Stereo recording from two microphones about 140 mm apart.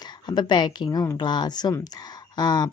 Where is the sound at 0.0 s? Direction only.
30° left (ahead or behind).